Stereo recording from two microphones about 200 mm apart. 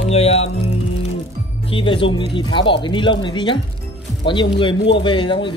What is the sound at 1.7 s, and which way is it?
Speech, 25° left (ahead or behind).